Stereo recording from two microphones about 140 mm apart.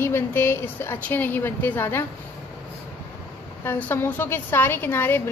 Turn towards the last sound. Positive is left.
turn(degrees=15)  # may be behind; listen again after turning